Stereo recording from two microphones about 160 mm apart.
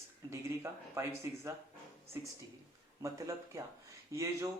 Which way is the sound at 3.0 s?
20° right (ahead or behind).